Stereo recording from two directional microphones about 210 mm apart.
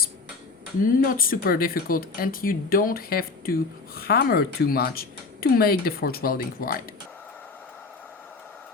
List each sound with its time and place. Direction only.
1.0 s speech: 45° left (ahead or behind)